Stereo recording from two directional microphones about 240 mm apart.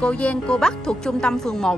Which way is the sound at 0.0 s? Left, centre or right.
Centre.